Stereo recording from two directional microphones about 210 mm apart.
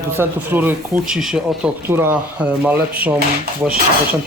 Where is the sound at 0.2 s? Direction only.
10° right (ahead or behind).